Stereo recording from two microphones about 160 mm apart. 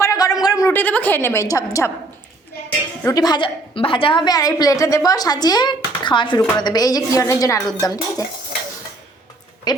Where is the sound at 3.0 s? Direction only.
20° left (ahead or behind).